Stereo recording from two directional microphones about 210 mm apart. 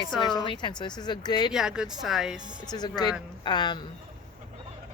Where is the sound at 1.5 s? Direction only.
5° right (ahead or behind).